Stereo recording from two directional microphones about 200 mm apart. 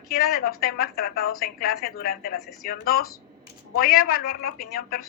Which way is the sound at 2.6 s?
45° left (ahead or behind).